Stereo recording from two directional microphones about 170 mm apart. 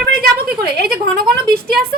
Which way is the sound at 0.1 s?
60° right (ahead or behind).